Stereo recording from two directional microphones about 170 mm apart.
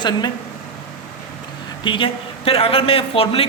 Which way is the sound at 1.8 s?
30° left (ahead or behind).